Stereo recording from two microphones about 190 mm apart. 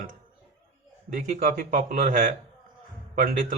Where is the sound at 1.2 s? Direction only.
40° right (ahead or behind).